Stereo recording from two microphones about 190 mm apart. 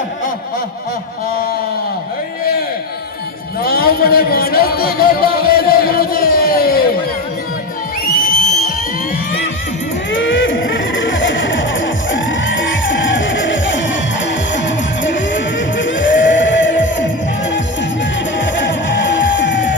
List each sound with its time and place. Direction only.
3.6 s music: 50° left (ahead or behind)
8.0 s music: 45° left (ahead or behind)
10.1 s music: 80° left
15.0 s music: 75° left (ahead or behind)
18.3 s music: 70° left (ahead or behind)